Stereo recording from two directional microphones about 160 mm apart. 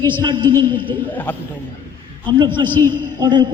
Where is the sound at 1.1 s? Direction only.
10° left (ahead or behind).